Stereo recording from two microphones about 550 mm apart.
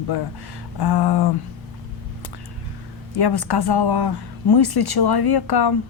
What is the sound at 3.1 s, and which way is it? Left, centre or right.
Speech, left.